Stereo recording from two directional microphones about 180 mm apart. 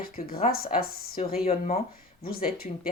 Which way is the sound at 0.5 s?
55° left (ahead or behind).